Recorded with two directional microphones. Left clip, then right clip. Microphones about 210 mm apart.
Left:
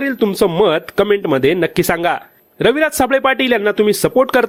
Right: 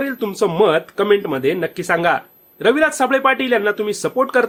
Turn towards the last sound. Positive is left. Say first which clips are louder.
# left 4 dB
turn(degrees=45)  # may be behind; listen again after turning